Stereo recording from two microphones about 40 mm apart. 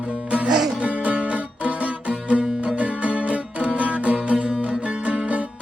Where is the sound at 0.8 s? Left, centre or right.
Right.